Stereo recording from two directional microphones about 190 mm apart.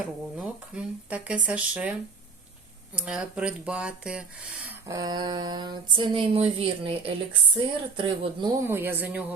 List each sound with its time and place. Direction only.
0.0 s speech: 5° right (ahead or behind); by 8.6 s 25° right (ahead or behind)
8.6 s speech: 10° right (ahead or behind)